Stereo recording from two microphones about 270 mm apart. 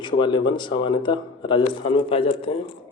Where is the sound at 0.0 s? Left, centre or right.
Centre.